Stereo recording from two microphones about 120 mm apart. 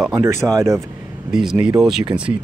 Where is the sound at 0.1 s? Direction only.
25° right (ahead or behind).